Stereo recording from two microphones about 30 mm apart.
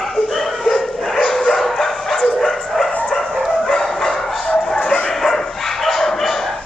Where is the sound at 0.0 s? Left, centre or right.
Centre.